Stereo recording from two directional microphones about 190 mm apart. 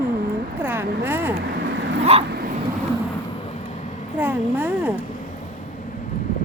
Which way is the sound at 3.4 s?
35° left (ahead or behind).